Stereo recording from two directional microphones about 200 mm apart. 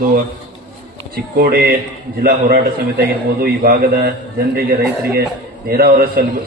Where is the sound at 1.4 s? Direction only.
50° right (ahead or behind).